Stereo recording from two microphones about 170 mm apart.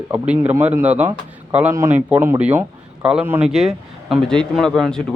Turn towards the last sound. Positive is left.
turn(degrees=5)  # may be behind; listen again after turning